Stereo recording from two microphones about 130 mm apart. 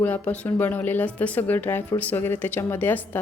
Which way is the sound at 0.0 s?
15° left (ahead or behind).